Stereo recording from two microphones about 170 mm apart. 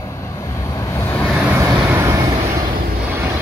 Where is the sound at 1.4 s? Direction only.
15° right (ahead or behind).